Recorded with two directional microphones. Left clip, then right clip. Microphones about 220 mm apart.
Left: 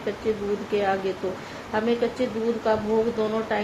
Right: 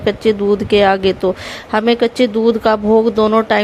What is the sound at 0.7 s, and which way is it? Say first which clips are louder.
Speech: right 12 dB; 45° right (ahead or behind).